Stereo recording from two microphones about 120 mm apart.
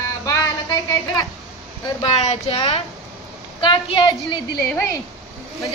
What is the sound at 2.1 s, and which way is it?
Speech, 65° left (ahead or behind).